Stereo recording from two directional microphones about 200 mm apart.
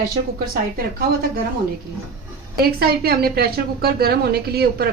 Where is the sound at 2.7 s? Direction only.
50° right (ahead or behind).